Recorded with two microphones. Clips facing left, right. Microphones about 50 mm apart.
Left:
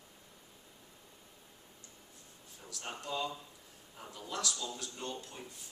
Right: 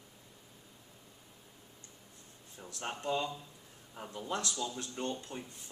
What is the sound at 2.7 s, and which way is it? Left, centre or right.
Speech, right.